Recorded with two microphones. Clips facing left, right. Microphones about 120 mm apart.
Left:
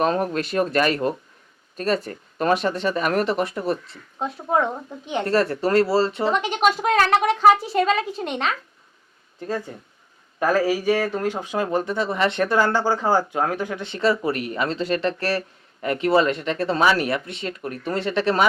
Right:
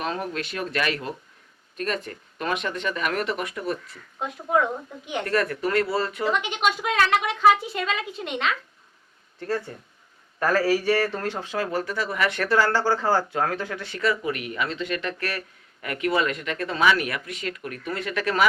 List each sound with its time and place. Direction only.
0.0 s speech: 45° left (ahead or behind)
6.3 s speech: 40° left (ahead or behind)
9.4 s speech: 15° left (ahead or behind)